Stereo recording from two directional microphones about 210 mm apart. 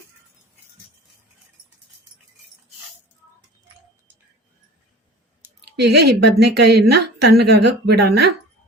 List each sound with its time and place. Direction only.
5.8 s a woman's voice: 50° right (ahead or behind)